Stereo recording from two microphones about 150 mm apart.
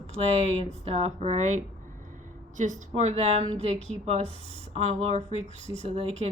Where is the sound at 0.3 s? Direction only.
45° right (ahead or behind).